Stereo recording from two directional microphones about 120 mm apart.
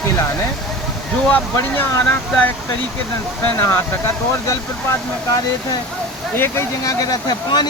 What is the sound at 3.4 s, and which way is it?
Speech, 20° left (ahead or behind).